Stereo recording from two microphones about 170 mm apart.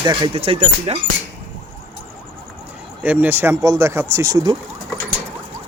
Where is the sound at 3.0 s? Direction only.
10° right (ahead or behind).